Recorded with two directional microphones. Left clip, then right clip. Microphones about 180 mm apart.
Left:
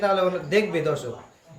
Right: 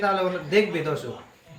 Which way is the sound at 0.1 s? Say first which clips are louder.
Left 1 dB; 40° left (ahead or behind).